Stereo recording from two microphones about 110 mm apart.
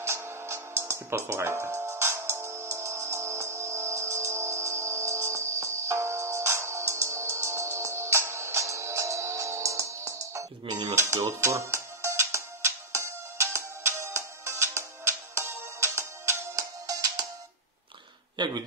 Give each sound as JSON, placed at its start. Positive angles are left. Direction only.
{"t": 0.0, "sound": "music", "side_deg": -25}
{"t": 18.4, "sound": "a man's voice", "side_deg": -45}